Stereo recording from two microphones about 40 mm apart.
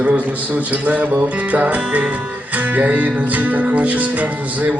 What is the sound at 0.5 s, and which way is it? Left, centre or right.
Speech, right.